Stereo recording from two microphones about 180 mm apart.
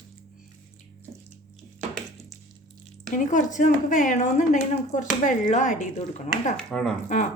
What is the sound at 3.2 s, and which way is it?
A woman's voice, 45° left (ahead or behind).